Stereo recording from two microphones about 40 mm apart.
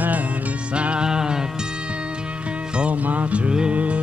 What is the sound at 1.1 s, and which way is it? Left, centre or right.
Music, centre.